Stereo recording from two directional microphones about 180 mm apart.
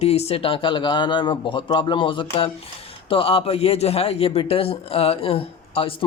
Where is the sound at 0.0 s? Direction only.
35° left (ahead or behind).